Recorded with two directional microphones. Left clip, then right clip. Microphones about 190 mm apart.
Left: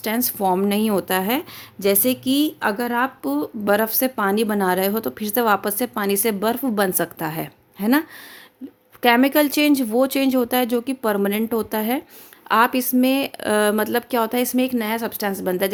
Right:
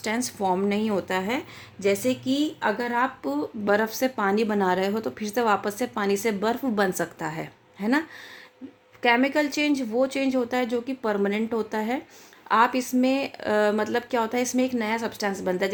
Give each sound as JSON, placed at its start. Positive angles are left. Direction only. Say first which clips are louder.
{"t": 0.0, "sound": "a woman's voice", "louder": "left 5 dB", "side_deg": 35}